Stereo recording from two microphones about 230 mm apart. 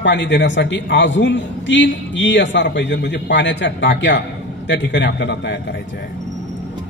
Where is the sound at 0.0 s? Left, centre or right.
Left.